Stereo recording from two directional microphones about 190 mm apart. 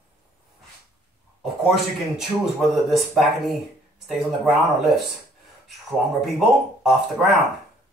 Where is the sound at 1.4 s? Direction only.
Centre (ahead or behind).